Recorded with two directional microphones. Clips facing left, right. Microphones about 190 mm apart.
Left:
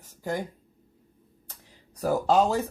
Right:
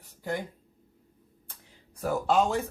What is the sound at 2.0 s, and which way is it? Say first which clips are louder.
Speech: left 3 dB; 35° left (ahead or behind).